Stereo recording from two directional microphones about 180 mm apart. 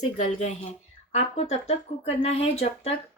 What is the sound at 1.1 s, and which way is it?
Speech, 35° left (ahead or behind).